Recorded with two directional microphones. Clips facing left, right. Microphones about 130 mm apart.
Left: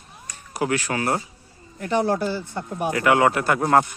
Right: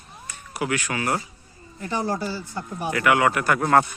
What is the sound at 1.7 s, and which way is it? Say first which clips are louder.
Speech: left 5 dB; 60° left (ahead or behind).